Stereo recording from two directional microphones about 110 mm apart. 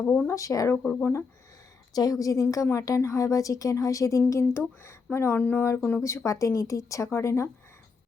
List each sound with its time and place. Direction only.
0.0 s speech: 15° left (ahead or behind)
0.3 s a woman's voice: 30° left (ahead or behind)
0.8 s speech: 15° left (ahead or behind)
1.9 s a woman's voice: 35° left (ahead or behind)